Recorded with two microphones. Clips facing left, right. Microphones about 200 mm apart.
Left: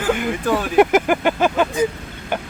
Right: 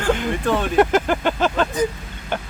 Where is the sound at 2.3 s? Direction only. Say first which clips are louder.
Left 2 dB; 10° left (ahead or behind).